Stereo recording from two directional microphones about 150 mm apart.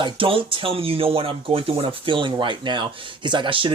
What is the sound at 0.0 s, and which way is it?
Speech, 35° right (ahead or behind).